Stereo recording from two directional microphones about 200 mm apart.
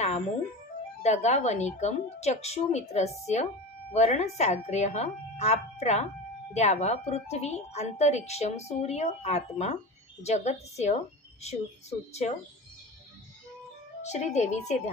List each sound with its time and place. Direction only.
1.0 s a woman's voice: 35° left (ahead or behind)
12.1 s a woman's voice: 35° left (ahead or behind)
14.0 s a woman's voice: 35° left (ahead or behind)